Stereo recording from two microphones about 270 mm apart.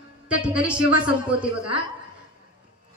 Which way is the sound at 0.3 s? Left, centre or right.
Centre.